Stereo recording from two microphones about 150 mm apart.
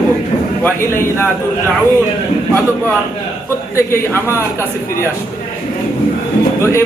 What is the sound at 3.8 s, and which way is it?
Speech, 15° left (ahead or behind).